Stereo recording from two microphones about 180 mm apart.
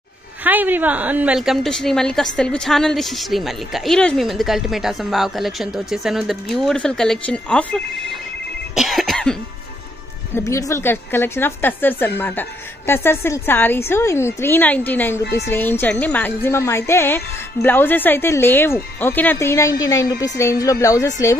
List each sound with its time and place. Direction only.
0.4 s a woman's voice: 10° right (ahead or behind)
8.7 s cough: centre (ahead or behind)
10.3 s a woman's voice: 15° left (ahead or behind)